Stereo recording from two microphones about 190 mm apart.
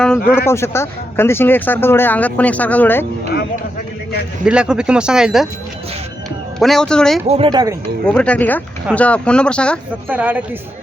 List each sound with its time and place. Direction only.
0.3 s speech: 15° left (ahead or behind)
4.4 s speech: 5° right (ahead or behind)
6.6 s speech: centre (ahead or behind)
7.3 s speech: 30° right (ahead or behind)
8.0 s speech: 5° left (ahead or behind)
10.1 s speech: 10° right (ahead or behind)